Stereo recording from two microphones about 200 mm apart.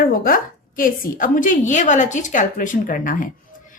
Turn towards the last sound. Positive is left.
turn(degrees=40)  # may be behind; listen again after turning